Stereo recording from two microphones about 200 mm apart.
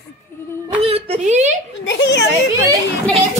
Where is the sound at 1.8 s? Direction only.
60° left (ahead or behind).